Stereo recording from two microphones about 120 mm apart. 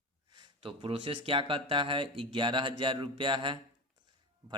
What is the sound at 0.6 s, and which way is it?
Speech, 50° right (ahead or behind).